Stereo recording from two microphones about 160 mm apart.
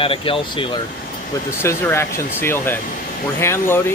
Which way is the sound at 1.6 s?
15° left (ahead or behind).